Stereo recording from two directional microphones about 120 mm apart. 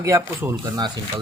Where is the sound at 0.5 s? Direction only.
35° right (ahead or behind).